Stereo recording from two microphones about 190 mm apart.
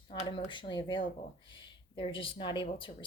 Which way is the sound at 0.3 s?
25° left (ahead or behind).